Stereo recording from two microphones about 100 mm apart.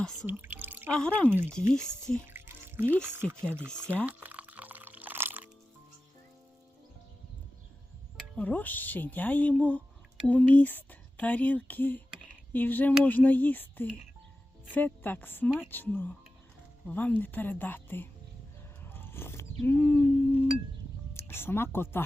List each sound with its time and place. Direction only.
0.0 s speech: 5° left (ahead or behind)
0.3 s drip: 20° right (ahead or behind)
0.9 s speech: 10° left (ahead or behind)
1.3 s speech: 20° right (ahead or behind)
2.2 s music: 20° right (ahead or behind)
3.4 s speech: 20° right (ahead or behind)
3.8 s music: 20° right (ahead or behind)
8.1 s a woman's voice: 15° left (ahead or behind)
18.9 s a sound: 20° left (ahead or behind)
21.1 s speech: 25° left (ahead or behind)